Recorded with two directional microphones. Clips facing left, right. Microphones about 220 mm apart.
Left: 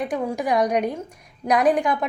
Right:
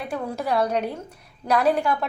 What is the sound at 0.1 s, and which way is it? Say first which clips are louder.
A woman's voice: left 3 dB; 15° left (ahead or behind).